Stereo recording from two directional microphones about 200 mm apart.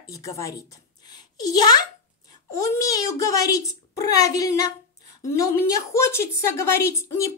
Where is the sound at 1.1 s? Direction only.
20° left (ahead or behind).